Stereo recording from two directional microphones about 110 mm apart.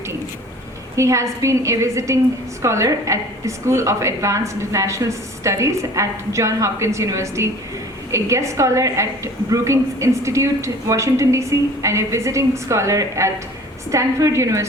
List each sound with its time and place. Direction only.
0.9 s a woman's voice: 25° right (ahead or behind)